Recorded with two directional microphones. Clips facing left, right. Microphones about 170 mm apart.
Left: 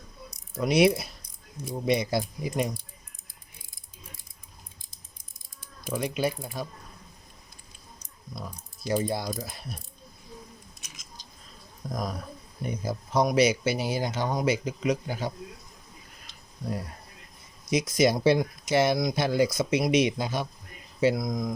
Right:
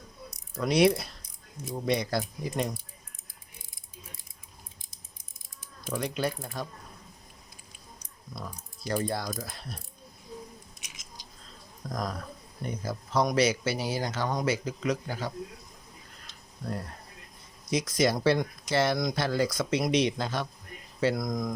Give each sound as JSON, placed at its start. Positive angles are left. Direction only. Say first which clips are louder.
{"t": 0.5, "sound": "speech", "louder": "left 1 dB", "side_deg": 10}
{"t": 5.8, "sound": "speech", "louder": "left 2 dB", "side_deg": 10}
{"t": 8.9, "sound": "speech", "louder": "left 3 dB", "side_deg": 15}
{"t": 11.9, "sound": "speech", "louder": "left 1 dB", "side_deg": 10}
{"t": 16.2, "sound": "a sound", "louder": "left 2 dB", "side_deg": 10}
{"t": 17.7, "sound": "speech", "louder": "left 3 dB", "side_deg": 10}